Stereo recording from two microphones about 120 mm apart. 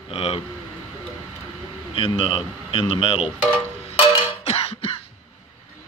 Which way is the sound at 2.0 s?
50° left (ahead or behind).